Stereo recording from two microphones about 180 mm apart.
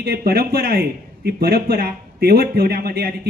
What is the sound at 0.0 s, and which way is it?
A man's voice, 55° right (ahead or behind).